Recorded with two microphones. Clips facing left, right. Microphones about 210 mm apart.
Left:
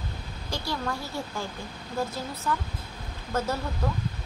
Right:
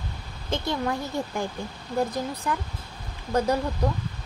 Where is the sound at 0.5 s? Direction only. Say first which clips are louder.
Right 5 dB; 20° right (ahead or behind).